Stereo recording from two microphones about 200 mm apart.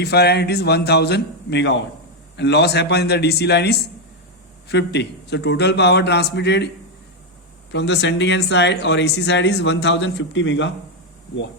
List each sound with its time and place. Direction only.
0.0 s speech: 55° left (ahead or behind)
7.7 s speech: 60° left (ahead or behind)